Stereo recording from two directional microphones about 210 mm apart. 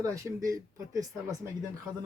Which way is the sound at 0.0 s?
15° right (ahead or behind).